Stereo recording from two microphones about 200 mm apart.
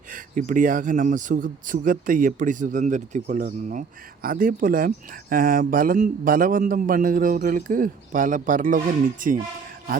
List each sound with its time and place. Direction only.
0.1 s a man's voice: 40° right (ahead or behind)